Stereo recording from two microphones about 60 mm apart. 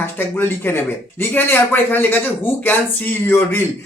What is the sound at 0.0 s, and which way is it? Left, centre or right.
Speech, left.